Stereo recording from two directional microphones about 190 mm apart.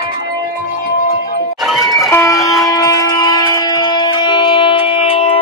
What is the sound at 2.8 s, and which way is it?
Music, 20° left (ahead or behind).